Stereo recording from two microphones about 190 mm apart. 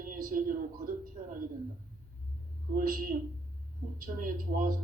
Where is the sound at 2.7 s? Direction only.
45° right (ahead or behind).